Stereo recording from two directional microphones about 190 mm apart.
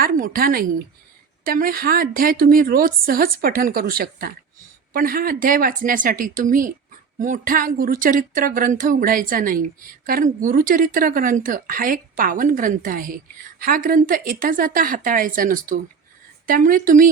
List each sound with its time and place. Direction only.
0.0 s speech: 50° right (ahead or behind)